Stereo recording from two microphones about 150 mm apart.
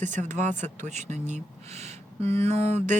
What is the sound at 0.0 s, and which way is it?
Speech, 55° right (ahead or behind).